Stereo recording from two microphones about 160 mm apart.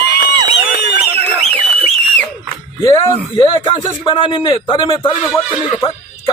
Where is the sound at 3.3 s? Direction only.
35° left (ahead or behind).